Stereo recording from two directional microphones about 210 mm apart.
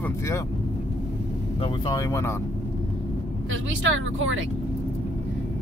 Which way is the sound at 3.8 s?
65° right (ahead or behind).